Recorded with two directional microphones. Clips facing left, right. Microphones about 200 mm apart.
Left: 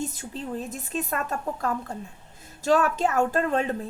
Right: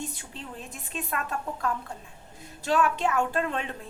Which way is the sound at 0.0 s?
40° left (ahead or behind).